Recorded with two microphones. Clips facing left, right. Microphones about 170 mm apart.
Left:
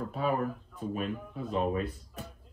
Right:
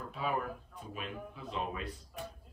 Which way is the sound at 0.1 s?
40° left (ahead or behind).